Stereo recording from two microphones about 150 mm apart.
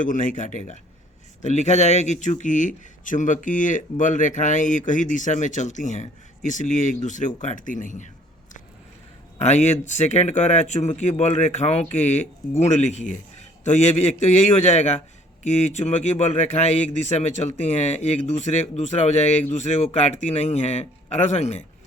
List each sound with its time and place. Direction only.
0.0 s speech: 60° left (ahead or behind)
9.4 s speech: 50° left (ahead or behind)